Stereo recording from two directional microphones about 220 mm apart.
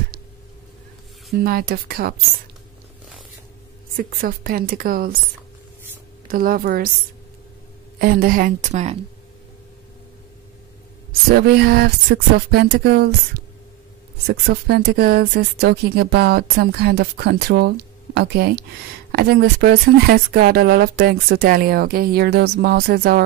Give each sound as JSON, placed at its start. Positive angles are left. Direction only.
{"t": 1.3, "sound": "speech", "side_deg": -45}
{"t": 3.9, "sound": "a woman's voice", "side_deg": -40}
{"t": 6.2, "sound": "a woman's voice", "side_deg": -40}
{"t": 8.0, "sound": "a woman's voice", "side_deg": -40}
{"t": 11.4, "sound": "speech", "side_deg": -45}
{"t": 14.2, "sound": "speech", "side_deg": -45}